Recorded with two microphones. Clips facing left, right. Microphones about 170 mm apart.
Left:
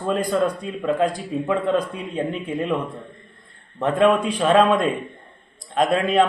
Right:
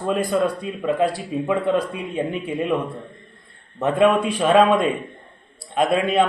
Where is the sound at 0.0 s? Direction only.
5° right (ahead or behind).